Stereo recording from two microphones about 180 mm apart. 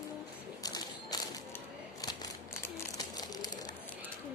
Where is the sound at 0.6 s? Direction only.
20° left (ahead or behind).